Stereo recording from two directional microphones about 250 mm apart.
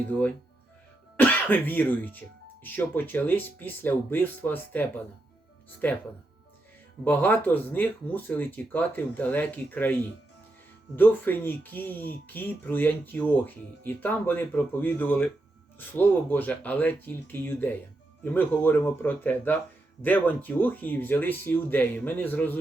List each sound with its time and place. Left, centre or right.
0.1 s speech: centre
7.0 s speech: centre